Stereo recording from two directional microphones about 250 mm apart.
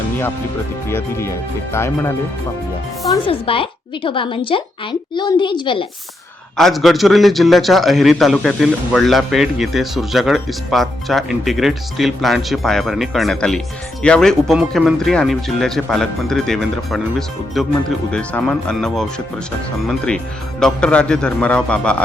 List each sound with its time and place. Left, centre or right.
0.9 s speech: centre
3.1 s a woman's voice: left
6.6 s a man's voice: centre